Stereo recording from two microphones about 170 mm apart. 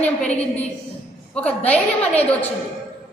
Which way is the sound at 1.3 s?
10° left (ahead or behind).